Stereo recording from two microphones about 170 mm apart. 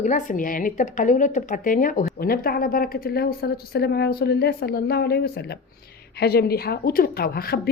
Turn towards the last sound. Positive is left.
turn(degrees=65)  # may be behind; listen again after turning